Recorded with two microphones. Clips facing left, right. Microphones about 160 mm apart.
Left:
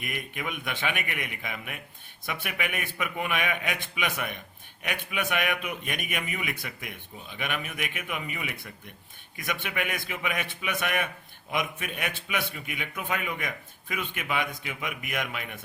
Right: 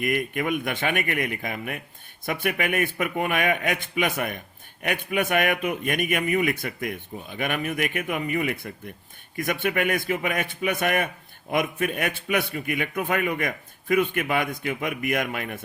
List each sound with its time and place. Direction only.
0.0 s a man's voice: 50° right (ahead or behind)